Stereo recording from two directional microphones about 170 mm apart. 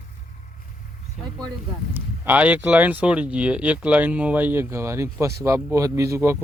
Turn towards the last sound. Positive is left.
turn(degrees=-15)  # may be behind; listen again after turning